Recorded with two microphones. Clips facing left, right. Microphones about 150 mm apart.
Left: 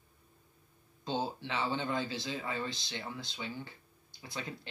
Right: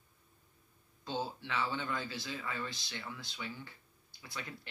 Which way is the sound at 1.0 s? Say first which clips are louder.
Left 3 dB; 25° left (ahead or behind).